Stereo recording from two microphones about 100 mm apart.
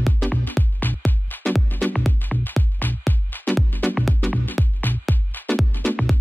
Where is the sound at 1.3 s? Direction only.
20° left (ahead or behind).